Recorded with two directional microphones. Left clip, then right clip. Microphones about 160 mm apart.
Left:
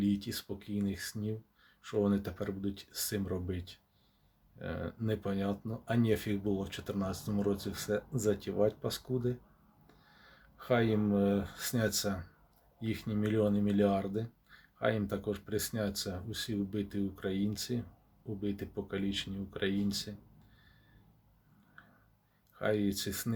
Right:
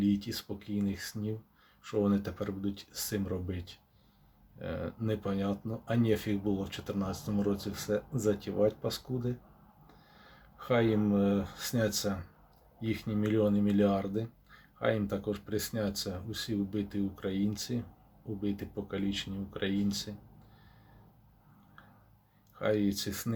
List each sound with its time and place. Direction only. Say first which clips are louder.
0.0 s speech: right 3 dB; 15° left (ahead or behind)
22.5 s speech: right 2 dB; 15° left (ahead or behind)